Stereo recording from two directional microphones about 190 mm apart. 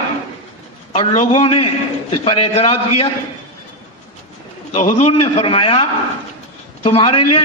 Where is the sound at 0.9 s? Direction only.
30° left (ahead or behind).